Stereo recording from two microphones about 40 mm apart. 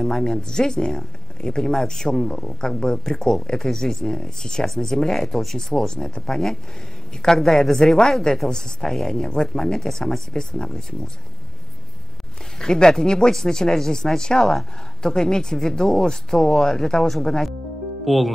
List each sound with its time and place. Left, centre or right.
0.0 s a woman's voice: centre
12.5 s speech: centre